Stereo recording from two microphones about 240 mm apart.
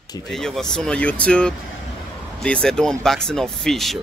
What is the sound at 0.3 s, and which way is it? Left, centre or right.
Speech, centre.